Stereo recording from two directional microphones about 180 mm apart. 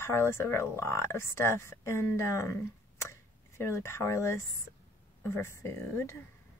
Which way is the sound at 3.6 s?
15° left (ahead or behind).